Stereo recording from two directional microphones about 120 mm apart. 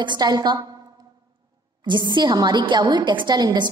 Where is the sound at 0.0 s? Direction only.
35° right (ahead or behind).